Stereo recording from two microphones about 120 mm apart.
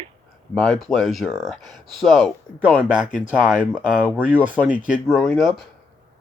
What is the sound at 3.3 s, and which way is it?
Speech, 10° right (ahead or behind).